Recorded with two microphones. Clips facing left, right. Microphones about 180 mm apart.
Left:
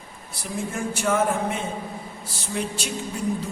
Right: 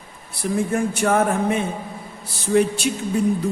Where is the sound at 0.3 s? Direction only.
60° right (ahead or behind).